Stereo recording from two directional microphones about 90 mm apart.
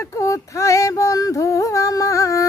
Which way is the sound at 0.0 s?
35° left (ahead or behind).